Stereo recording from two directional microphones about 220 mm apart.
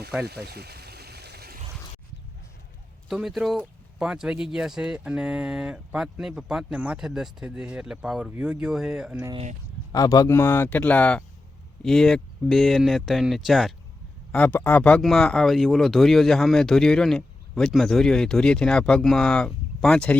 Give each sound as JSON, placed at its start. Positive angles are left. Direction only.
{"t": 0.3, "sound": "pour", "side_deg": -45}
{"t": 3.1, "sound": "speech", "side_deg": 0}
{"t": 9.9, "sound": "speech", "side_deg": 15}